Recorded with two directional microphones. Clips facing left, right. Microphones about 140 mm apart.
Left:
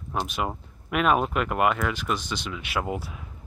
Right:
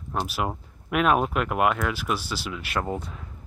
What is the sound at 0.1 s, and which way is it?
Speech, centre (ahead or behind).